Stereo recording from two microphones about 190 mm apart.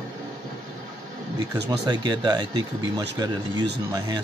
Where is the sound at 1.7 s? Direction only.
20° right (ahead or behind).